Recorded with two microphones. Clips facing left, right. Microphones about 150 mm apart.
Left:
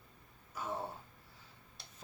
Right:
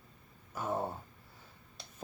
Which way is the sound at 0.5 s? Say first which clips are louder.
Right 5 dB; 50° right (ahead or behind).